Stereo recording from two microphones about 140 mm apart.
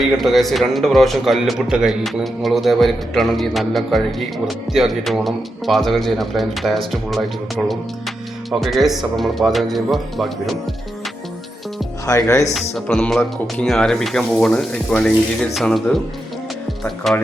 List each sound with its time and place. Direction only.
0.0 s speech: centre (ahead or behind)
12.0 s speech: 20° left (ahead or behind)
12.5 s speech: centre (ahead or behind)